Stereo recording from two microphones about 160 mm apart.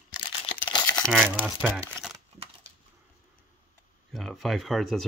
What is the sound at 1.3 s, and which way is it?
Speech, 10° right (ahead or behind).